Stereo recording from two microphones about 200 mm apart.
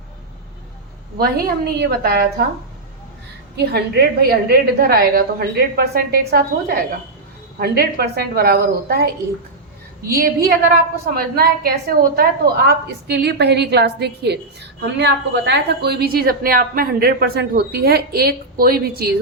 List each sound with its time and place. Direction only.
1.2 s a woman's voice: 50° right (ahead or behind)
3.7 s a woman's voice: 50° right (ahead or behind)
10.1 s a woman's voice: 50° right (ahead or behind)